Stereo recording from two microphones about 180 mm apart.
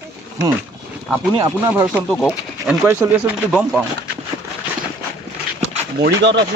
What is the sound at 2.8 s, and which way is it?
Speech, 15° right (ahead or behind).